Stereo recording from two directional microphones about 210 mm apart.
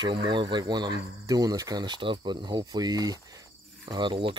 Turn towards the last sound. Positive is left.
turn(degrees=-25)  # may be behind; listen again after turning